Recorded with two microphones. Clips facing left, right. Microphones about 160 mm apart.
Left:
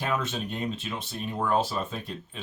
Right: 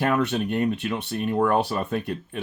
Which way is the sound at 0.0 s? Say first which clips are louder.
Right 7 dB; 65° right (ahead or behind).